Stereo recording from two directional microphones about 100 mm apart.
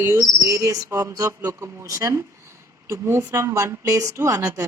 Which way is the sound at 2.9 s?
25° right (ahead or behind).